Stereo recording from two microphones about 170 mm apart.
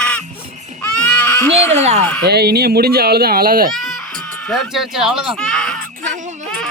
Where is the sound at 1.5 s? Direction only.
40° right (ahead or behind).